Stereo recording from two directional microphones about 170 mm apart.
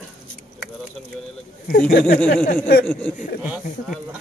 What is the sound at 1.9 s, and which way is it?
Speech, 55° left (ahead or behind).